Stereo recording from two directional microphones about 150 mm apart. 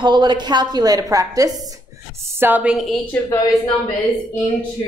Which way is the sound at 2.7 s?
Centre (ahead or behind).